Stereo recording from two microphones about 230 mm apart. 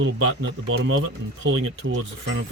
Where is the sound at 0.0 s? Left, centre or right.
Right.